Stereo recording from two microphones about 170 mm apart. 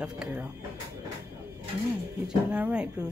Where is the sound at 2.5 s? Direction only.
5° right (ahead or behind).